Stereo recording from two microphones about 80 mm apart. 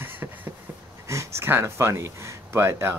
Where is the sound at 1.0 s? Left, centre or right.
Right.